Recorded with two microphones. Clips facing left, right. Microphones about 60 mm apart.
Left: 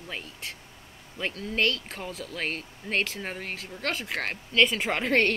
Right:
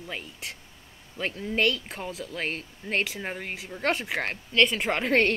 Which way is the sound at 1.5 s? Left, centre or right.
Centre.